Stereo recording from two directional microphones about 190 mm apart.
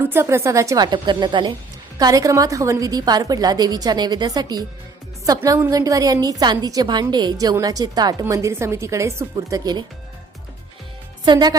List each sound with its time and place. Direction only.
0.0 s a woman's voice: 10° right (ahead or behind)
11.3 s a woman's voice: 20° right (ahead or behind)